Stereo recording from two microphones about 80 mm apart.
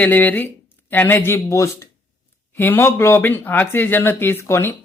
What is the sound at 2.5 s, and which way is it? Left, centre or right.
Speech, left.